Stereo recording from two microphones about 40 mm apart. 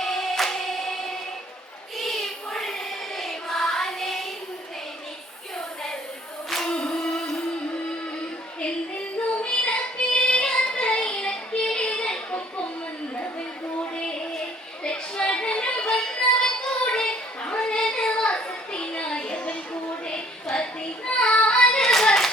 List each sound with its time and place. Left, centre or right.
0.0 s a sound: centre
2.0 s child singing: centre
3.2 s music: centre
6.7 s singing: centre
7.1 s music: centre
9.5 s music: left
12.0 s a sound: left
13.9 s a sound: centre
14.8 s music: left
20.1 s a sound: left
21.1 s child singing: left
21.4 s hands: left